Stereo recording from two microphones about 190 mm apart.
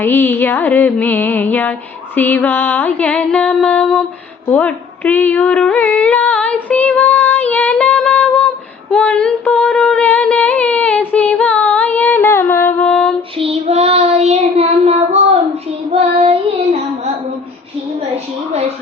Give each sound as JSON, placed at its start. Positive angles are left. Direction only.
{"t": 0.0, "sound": "mantra", "side_deg": 10}
{"t": 4.5, "sound": "a sound", "side_deg": 10}
{"t": 12.9, "sound": "female singing", "side_deg": 5}
{"t": 13.4, "sound": "child singing", "side_deg": -30}